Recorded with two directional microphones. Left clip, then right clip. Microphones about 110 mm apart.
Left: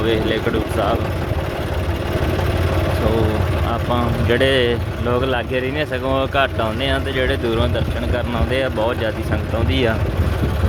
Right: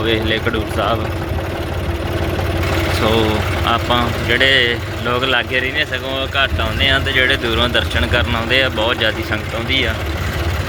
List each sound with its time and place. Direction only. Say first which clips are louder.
0.0 s speech: right 2 dB; 30° left (ahead or behind)
4.3 s speech: right 3 dB; 45° left (ahead or behind)
5.0 s speech: right 3 dB; 30° left (ahead or behind)
5.7 s speech: right 1 dB; 55° left (ahead or behind)
6.8 s speech: right 9 dB; 30° left (ahead or behind)
7.7 s speech: right 6 dB; 15° left (ahead or behind)
8.4 s speech: right 3 dB; 25° left (ahead or behind)